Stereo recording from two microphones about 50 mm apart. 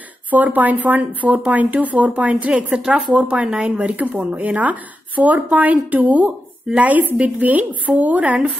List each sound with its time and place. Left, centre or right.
0.3 s speech: right